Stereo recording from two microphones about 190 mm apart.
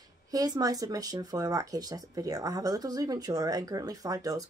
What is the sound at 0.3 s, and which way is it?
Speech, 20° right (ahead or behind).